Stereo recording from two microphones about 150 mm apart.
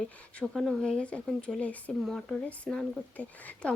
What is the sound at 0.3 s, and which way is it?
Speech, centre (ahead or behind).